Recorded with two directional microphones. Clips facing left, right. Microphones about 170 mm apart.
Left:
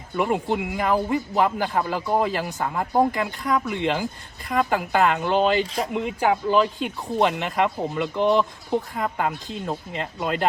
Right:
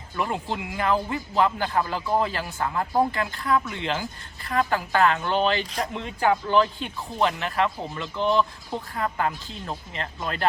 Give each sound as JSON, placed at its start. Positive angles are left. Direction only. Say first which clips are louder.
{"t": 0.2, "sound": "speech", "louder": "left 5 dB", "side_deg": 15}